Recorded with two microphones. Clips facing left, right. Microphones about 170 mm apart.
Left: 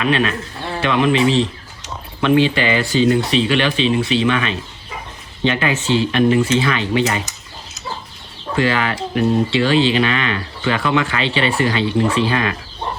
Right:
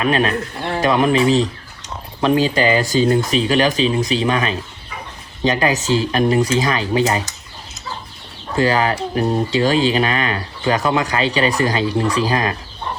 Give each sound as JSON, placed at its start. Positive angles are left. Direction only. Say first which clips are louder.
{"t": 0.0, "sound": "speech", "louder": "right 1 dB", "side_deg": -40}
{"t": 8.5, "sound": "speech", "louder": "right 2 dB", "side_deg": -40}